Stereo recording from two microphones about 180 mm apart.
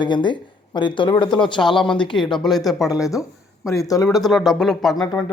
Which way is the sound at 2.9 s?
20° left (ahead or behind).